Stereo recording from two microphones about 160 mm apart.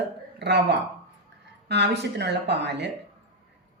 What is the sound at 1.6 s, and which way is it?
Speech, 90° right.